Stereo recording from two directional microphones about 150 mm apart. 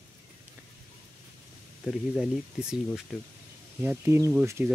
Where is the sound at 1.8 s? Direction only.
5° right (ahead or behind).